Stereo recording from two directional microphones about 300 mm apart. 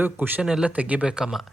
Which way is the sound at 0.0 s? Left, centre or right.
Centre.